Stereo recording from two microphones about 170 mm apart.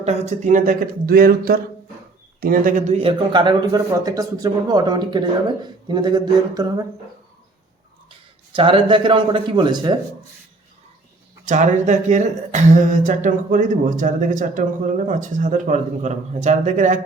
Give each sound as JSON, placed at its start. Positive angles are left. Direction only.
{"t": 0.0, "sound": "speech", "side_deg": -40}
{"t": 8.5, "sound": "speech", "side_deg": -30}
{"t": 11.4, "sound": "speech", "side_deg": -45}